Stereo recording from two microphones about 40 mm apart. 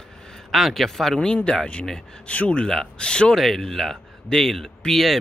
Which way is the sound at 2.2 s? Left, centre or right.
Left.